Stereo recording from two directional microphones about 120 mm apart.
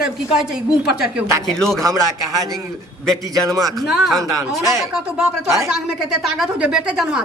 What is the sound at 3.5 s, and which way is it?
Speech, 30° right (ahead or behind).